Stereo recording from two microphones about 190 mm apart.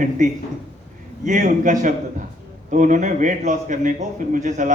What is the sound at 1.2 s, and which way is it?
A man's voice, 40° right (ahead or behind).